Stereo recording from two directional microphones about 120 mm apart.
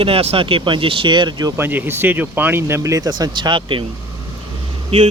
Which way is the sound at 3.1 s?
40° right (ahead or behind).